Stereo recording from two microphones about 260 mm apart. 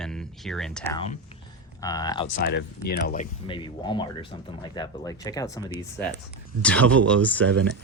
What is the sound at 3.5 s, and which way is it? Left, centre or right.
Speech, centre.